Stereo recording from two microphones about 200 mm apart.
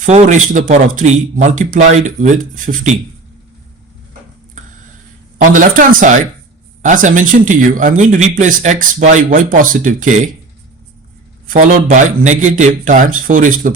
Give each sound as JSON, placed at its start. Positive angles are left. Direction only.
{"t": 0.0, "sound": "speech", "side_deg": -35}
{"t": 5.4, "sound": "speech", "side_deg": -40}
{"t": 11.4, "sound": "speech", "side_deg": -40}